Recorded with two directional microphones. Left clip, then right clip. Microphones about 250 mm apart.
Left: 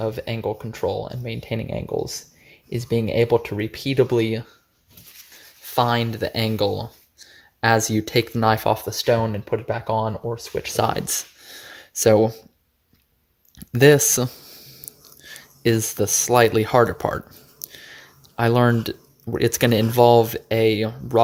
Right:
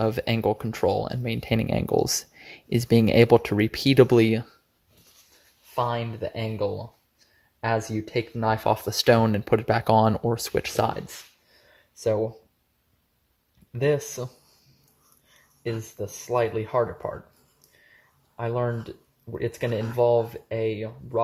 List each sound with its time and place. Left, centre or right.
0.0 s speech: right
5.7 s speech: left
8.6 s speech: centre
8.9 s speech: right
10.8 s speech: centre
12.0 s speech: left
13.7 s speech: left
15.6 s speech: left
18.3 s speech: left